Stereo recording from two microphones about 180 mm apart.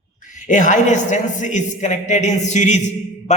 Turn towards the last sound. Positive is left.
turn(degrees=40)  # may be behind; listen again after turning